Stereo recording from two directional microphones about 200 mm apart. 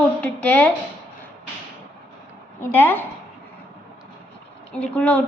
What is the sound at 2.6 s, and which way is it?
Speech, 10° left (ahead or behind).